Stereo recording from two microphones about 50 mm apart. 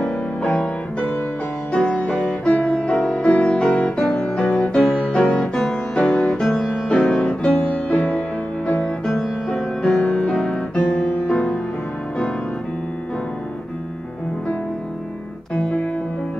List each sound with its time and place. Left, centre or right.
0.0 s music: left
4.0 s music: left
4.6 s music: centre
7.6 s music: left
9.5 s music: centre
10.7 s music: left
15.5 s piano: left